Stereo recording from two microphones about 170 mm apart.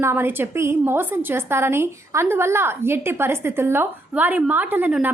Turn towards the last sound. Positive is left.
turn(degrees=-10)  # may be behind; listen again after turning